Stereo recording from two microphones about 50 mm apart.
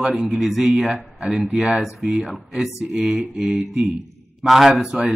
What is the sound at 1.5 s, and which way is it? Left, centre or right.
A man's voice, centre.